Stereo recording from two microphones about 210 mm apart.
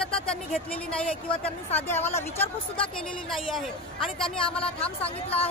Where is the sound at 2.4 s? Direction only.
25° left (ahead or behind).